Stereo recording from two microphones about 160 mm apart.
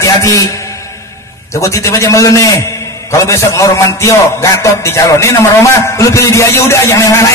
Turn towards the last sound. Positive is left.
turn(degrees=20)  # may be behind; listen again after turning